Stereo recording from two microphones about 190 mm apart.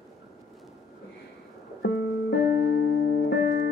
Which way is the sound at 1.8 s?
70° left (ahead or behind).